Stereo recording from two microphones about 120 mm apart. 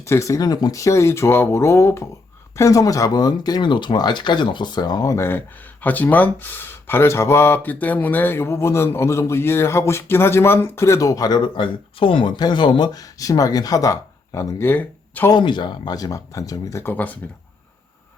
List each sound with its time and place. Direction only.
0.0 s a man's voice: 25° left (ahead or behind)
5.1 s a man's voice: 20° left (ahead or behind)
15.3 s a man's voice: 40° left (ahead or behind); by 17.2 s 15° left (ahead or behind)